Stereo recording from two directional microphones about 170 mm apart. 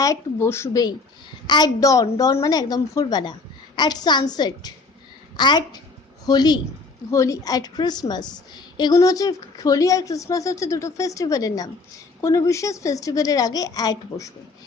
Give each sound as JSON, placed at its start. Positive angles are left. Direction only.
{"t": 0.0, "sound": "speech", "side_deg": 15}